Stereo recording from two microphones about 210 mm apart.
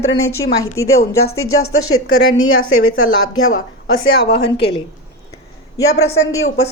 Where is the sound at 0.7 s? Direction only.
15° left (ahead or behind).